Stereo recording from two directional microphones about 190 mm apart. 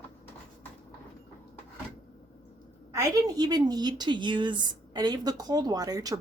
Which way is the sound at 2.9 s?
15° right (ahead or behind).